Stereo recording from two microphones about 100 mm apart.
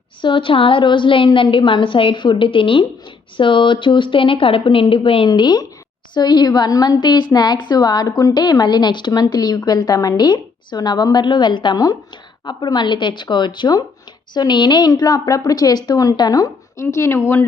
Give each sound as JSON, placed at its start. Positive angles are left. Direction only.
{"t": 0.2, "sound": "a woman's voice", "side_deg": 55}
{"t": 5.3, "sound": "a woman's voice", "side_deg": 45}
{"t": 16.8, "sound": "speech", "side_deg": 25}